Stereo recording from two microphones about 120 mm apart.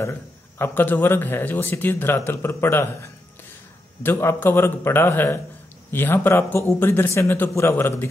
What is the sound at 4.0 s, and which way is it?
Speech, 20° left (ahead or behind).